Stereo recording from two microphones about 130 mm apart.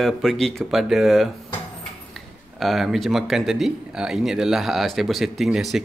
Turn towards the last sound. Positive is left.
turn(degrees=0)  # may be behind; listen again after turning